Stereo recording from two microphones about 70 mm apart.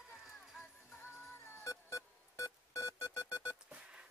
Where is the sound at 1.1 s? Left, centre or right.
Left.